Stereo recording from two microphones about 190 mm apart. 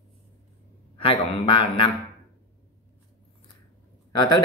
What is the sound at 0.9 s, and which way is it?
Speech, 30° left (ahead or behind).